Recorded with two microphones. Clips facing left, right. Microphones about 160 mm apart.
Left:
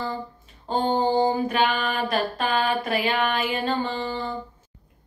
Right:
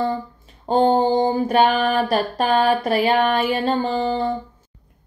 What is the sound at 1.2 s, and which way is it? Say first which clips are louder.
Female singing: right 5 dB; 35° right (ahead or behind).